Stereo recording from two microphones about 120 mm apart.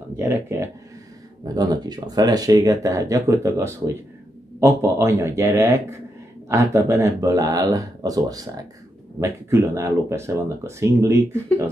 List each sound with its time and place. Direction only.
0.1 s speech: 20° right (ahead or behind)
1.4 s speech: 30° right (ahead or behind)